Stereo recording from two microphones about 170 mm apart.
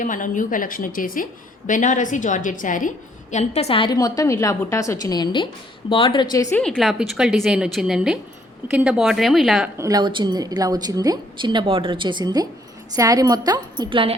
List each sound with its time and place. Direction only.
0.0 s a woman's voice: 50° left (ahead or behind)
3.3 s a woman's voice: 40° left (ahead or behind); by 6.6 s 20° left (ahead or behind)
6.6 s a woman's voice: centre (ahead or behind)
9.7 s a woman's voice: 20° right (ahead or behind)